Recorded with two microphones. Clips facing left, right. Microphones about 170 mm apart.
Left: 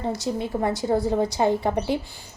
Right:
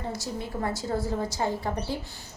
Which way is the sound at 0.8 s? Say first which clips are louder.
Left 7 dB; 65° left (ahead or behind).